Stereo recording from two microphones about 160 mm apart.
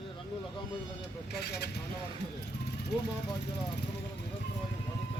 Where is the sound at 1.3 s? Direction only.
90° left.